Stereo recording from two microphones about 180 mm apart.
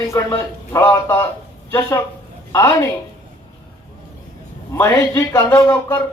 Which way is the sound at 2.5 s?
15° left (ahead or behind).